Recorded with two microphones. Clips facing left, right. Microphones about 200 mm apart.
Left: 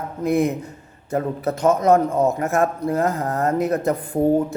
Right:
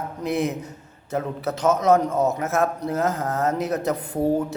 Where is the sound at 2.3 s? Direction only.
5° right (ahead or behind).